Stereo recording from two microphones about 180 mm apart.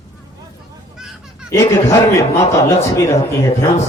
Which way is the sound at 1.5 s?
15° left (ahead or behind).